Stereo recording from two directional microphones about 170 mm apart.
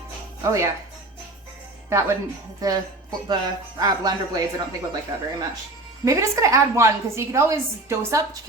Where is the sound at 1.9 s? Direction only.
15° right (ahead or behind).